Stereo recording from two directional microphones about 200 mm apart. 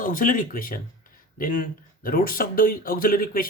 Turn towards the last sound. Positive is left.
turn(degrees=45)  # may be behind; listen again after turning